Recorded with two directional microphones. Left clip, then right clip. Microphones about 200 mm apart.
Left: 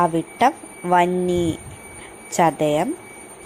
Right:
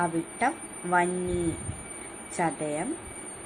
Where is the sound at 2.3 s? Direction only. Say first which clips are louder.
Left 12 dB; 40° left (ahead or behind).